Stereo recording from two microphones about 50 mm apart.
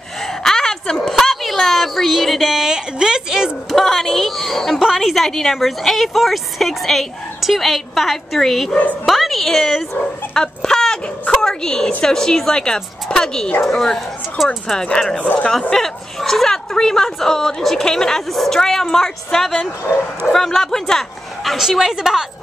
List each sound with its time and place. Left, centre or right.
0.3 s a sound: centre
3.7 s a woman's voice: centre
9.0 s a sound: centre
12.0 s speech: centre
14.4 s a woman's voice: centre
14.8 s speech: centre
15.2 s speech: left
15.7 s speech: centre
21.5 s speech: centre